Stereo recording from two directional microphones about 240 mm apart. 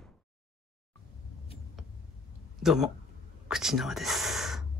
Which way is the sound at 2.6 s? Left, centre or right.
Centre.